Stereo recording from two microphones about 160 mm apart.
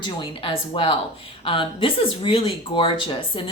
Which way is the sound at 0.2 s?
35° left (ahead or behind).